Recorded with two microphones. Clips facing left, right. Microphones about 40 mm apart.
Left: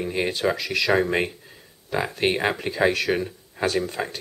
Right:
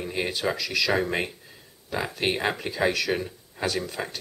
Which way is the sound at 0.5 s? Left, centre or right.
Left.